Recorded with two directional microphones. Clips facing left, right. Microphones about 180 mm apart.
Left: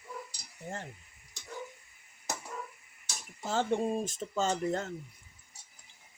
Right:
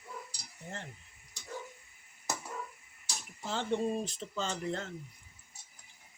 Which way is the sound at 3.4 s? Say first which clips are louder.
Left 3 dB; 45° left (ahead or behind).